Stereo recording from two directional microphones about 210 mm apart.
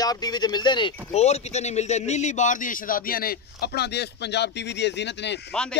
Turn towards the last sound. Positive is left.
turn(degrees=5)  # may be behind; listen again after turning